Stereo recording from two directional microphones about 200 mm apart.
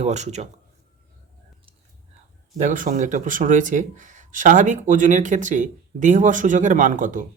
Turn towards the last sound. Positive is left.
turn(degrees=-40)  # may be behind; listen again after turning